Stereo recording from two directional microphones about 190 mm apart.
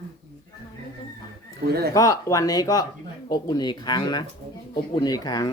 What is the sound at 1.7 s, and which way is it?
Speech, 55° right (ahead or behind).